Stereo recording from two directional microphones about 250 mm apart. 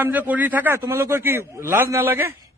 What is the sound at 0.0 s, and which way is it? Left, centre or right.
A man's voice, centre.